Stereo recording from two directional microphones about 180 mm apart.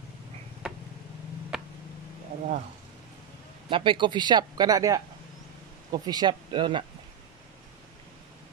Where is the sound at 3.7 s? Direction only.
25° right (ahead or behind).